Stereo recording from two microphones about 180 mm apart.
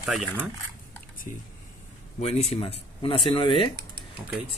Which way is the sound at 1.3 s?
45° left (ahead or behind).